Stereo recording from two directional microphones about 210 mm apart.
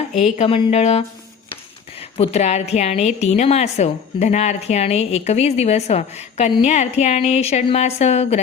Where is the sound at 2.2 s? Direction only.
30° left (ahead or behind).